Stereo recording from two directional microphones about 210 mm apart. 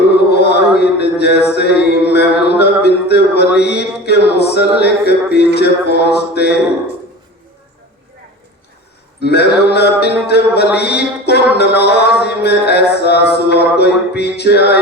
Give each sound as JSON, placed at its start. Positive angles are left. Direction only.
{"t": 0.1, "sound": "a sound", "side_deg": 50}
{"t": 4.8, "sound": "speech", "side_deg": 50}
{"t": 9.2, "sound": "speech", "side_deg": 50}